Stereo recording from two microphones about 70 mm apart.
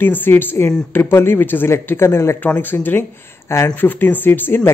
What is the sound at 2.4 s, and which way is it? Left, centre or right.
Speech, left.